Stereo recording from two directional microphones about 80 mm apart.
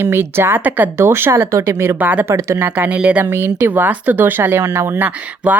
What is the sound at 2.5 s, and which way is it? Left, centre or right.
Speech, right.